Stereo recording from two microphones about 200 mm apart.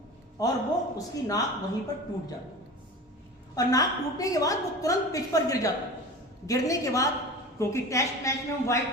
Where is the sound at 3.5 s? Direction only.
15° left (ahead or behind).